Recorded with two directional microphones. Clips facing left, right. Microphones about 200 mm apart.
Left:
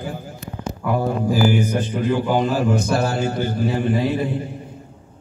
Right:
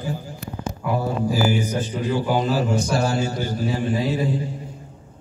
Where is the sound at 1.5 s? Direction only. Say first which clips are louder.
Left 3 dB; 55° left (ahead or behind).